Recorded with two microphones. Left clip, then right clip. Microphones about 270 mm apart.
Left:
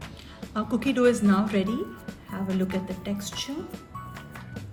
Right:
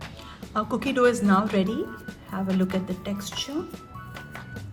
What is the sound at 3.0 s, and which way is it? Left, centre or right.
Speech, centre.